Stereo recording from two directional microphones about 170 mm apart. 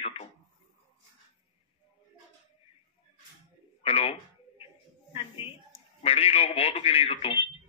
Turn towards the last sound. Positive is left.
turn(degrees=35)  # may be behind; listen again after turning